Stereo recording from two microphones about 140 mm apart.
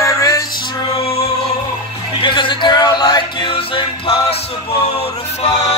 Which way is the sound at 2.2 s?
35° left (ahead or behind).